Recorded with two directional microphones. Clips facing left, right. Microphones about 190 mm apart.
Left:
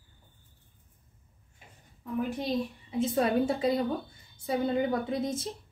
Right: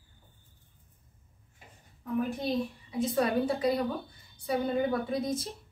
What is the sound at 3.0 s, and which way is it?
Speech, 25° left (ahead or behind).